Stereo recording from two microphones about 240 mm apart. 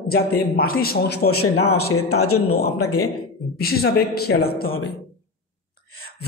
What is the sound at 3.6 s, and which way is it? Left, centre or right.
A man's voice, left.